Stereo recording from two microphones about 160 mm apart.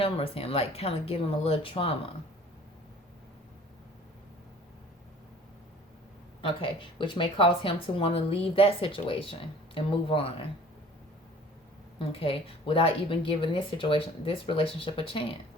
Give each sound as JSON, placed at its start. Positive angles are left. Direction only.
{"t": 0.0, "sound": "speech", "side_deg": 35}
{"t": 6.4, "sound": "speech", "side_deg": 30}
{"t": 11.9, "sound": "speech", "side_deg": 35}